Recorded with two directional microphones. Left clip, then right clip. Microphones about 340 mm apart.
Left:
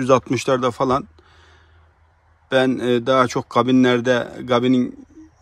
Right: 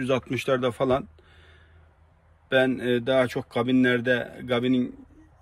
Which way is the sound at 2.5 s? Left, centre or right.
Centre.